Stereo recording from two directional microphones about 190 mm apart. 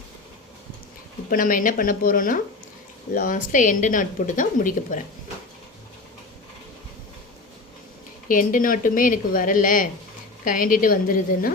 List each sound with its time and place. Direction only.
1.3 s a woman's voice: 45° left (ahead or behind)
8.3 s a woman's voice: 45° left (ahead or behind)